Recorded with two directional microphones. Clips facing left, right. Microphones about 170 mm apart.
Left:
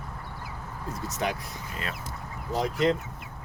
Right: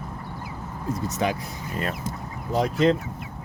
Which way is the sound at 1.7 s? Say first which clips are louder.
Right 8 dB; 45° right (ahead or behind).